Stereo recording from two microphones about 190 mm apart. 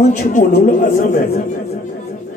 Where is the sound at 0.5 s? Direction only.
50° left (ahead or behind).